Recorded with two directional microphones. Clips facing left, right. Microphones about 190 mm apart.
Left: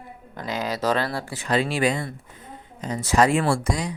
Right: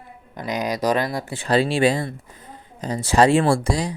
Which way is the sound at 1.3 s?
30° right (ahead or behind).